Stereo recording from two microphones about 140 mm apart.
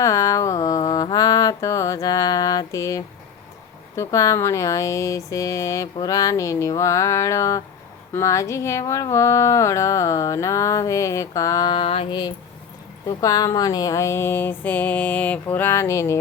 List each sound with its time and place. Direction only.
0.0 s mantra: 25° left (ahead or behind)
3.9 s speech: 25° left (ahead or behind)
11.8 s mantra: 45° left (ahead or behind)
13.1 s speech: 25° left (ahead or behind)